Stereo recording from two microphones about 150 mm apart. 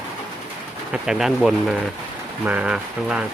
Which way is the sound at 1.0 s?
5° right (ahead or behind).